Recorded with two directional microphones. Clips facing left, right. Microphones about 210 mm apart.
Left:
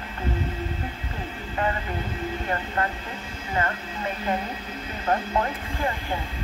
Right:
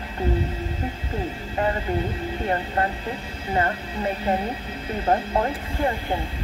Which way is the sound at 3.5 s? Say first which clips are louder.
Right 4 dB; 35° right (ahead or behind).